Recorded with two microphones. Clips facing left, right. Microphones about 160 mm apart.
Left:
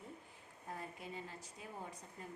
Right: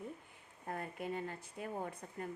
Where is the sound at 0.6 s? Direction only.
60° right (ahead or behind).